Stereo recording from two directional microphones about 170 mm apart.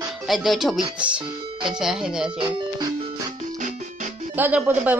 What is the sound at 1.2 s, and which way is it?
Music, 30° right (ahead or behind).